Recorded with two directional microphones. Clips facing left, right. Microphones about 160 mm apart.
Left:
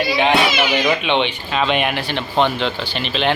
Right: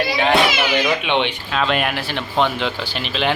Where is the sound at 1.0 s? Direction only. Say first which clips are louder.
Left 1 dB; 10° right (ahead or behind).